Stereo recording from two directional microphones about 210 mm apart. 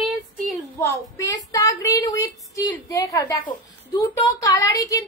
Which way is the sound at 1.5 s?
15° left (ahead or behind).